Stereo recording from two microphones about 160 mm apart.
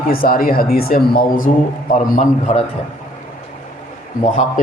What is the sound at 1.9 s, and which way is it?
Speech, 50° left (ahead or behind).